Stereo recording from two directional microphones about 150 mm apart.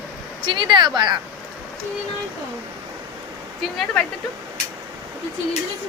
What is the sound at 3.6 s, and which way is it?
Speech, centre (ahead or behind).